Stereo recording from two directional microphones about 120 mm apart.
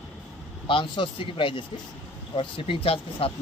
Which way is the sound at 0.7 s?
45° left (ahead or behind).